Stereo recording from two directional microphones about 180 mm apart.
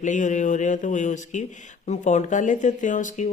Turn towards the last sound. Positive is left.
turn(degrees=45)  # may be behind; listen again after turning